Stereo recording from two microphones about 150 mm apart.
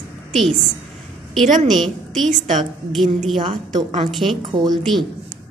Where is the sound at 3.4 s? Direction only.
35° right (ahead or behind).